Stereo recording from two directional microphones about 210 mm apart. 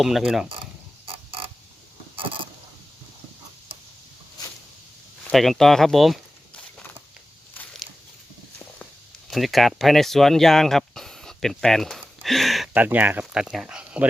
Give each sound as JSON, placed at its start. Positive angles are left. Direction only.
{"t": 0.0, "sound": "speech", "side_deg": 0}
{"t": 0.4, "sound": "mechanisms", "side_deg": -25}
{"t": 5.3, "sound": "speech", "side_deg": 0}
{"t": 9.3, "sound": "speech", "side_deg": 0}